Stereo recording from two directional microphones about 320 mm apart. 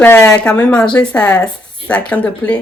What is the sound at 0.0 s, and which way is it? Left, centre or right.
Speech, centre.